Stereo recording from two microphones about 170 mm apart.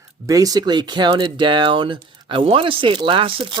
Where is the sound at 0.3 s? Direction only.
20° right (ahead or behind).